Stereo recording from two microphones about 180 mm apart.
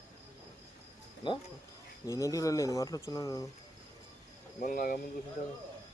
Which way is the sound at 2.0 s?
20° left (ahead or behind).